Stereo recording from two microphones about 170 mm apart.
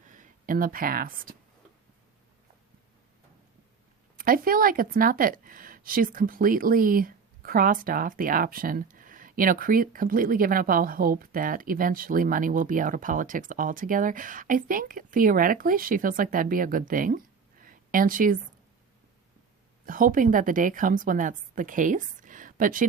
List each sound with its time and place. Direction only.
0.1 s speech: 50° right (ahead or behind)
4.2 s a woman's voice: 55° right (ahead or behind)
19.8 s a woman's voice: 55° right (ahead or behind)